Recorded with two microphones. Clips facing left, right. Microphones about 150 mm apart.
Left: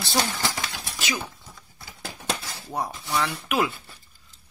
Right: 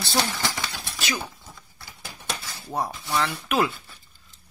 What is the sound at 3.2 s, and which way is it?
Speech, 5° left (ahead or behind).